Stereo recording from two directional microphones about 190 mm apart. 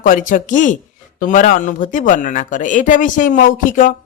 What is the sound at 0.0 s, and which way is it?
Speech, 45° left (ahead or behind).